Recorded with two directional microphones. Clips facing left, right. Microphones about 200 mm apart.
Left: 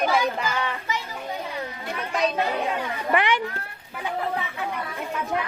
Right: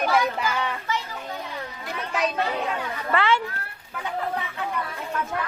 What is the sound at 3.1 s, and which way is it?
Speech, 15° left (ahead or behind).